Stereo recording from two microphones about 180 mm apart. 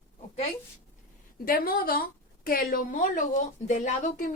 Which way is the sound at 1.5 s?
55° left (ahead or behind).